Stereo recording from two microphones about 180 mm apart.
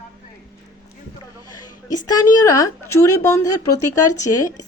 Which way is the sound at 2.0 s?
20° left (ahead or behind).